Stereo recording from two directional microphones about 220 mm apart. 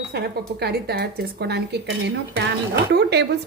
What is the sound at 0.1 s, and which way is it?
A woman's voice, 45° right (ahead or behind).